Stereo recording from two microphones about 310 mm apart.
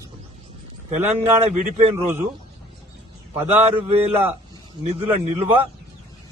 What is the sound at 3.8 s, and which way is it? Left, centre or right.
A man's voice, centre.